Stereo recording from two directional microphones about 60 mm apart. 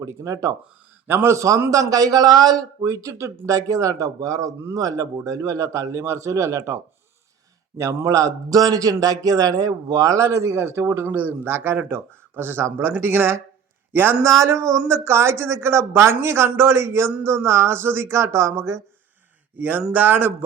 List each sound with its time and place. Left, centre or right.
0.0 s speech: right
1.0 s speech: right
1.7 s speech: right
7.8 s speech: right
10.5 s speech: right
14.3 s speech: right
19.5 s speech: right